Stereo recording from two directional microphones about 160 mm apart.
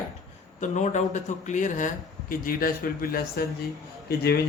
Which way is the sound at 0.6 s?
50° left (ahead or behind).